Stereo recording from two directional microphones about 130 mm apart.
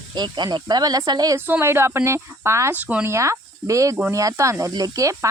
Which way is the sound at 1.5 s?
15° right (ahead or behind).